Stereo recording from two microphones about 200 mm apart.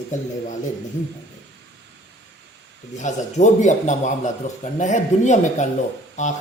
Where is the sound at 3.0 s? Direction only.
35° left (ahead or behind).